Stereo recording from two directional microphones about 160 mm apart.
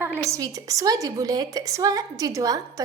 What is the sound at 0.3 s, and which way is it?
A woman's voice, 20° right (ahead or behind).